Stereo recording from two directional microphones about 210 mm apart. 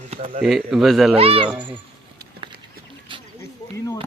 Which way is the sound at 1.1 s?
25° right (ahead or behind).